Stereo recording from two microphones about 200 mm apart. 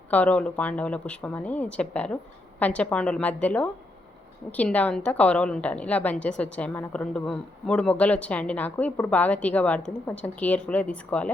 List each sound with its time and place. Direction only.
0.1 s a woman's voice: 5° left (ahead or behind)